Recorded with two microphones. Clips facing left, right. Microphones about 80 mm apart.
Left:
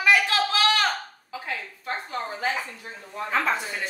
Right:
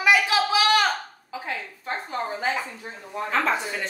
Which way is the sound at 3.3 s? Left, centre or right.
Centre.